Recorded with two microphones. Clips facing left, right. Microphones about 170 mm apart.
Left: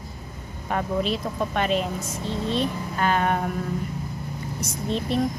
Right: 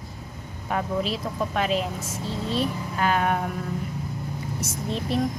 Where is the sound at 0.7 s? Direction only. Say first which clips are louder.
Left 1 dB; 5° right (ahead or behind).